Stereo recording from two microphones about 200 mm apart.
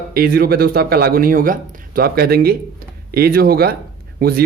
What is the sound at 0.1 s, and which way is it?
Speech, 50° right (ahead or behind).